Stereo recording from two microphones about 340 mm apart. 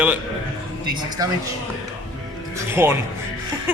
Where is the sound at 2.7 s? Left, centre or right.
Centre.